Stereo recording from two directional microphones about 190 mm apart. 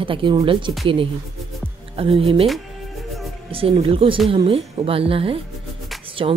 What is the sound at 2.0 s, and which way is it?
Speech, 30° right (ahead or behind).